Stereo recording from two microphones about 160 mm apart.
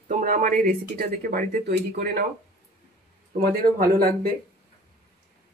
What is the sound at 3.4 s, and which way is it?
Speech, 70° right (ahead or behind).